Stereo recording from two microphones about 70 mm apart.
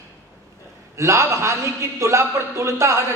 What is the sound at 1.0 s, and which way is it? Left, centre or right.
A man's voice, right.